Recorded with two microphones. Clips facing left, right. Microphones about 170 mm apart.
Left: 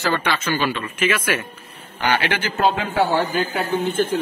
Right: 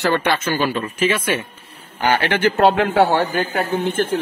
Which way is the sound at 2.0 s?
50° right (ahead or behind).